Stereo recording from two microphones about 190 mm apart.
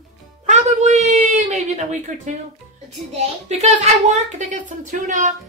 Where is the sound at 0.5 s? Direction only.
35° right (ahead or behind).